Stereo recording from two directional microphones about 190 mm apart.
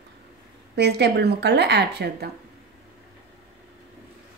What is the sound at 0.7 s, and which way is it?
A woman's voice, 60° right (ahead or behind).